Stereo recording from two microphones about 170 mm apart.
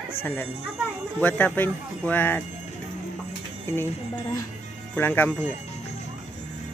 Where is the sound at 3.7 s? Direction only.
15° left (ahead or behind).